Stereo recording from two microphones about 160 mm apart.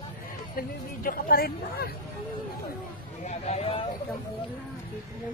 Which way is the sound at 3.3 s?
40° left (ahead or behind).